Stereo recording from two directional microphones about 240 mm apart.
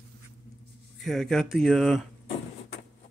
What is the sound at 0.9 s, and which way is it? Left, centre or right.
Speech, centre.